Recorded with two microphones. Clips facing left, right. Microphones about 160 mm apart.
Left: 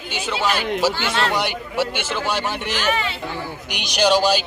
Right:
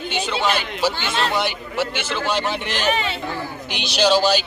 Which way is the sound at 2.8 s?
20° right (ahead or behind).